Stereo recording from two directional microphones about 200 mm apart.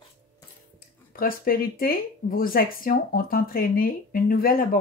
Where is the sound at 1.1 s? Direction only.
45° left (ahead or behind).